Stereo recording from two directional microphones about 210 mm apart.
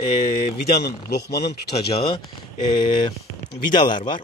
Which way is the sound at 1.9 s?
25° left (ahead or behind).